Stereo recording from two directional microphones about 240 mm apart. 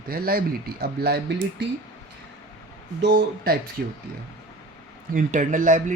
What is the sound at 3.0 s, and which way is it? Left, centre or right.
Speech, right.